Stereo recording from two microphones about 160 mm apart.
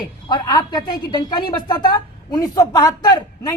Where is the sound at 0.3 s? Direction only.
30° left (ahead or behind).